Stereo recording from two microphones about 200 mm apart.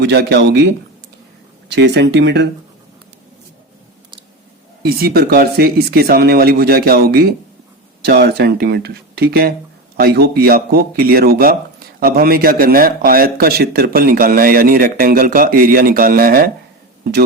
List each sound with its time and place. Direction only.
0.0 s speech: 55° right (ahead or behind)
1.7 s speech: 60° right (ahead or behind)
4.8 s a man's voice: 50° right (ahead or behind)